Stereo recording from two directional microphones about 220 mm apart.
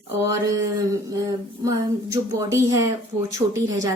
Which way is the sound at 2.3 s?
15° right (ahead or behind).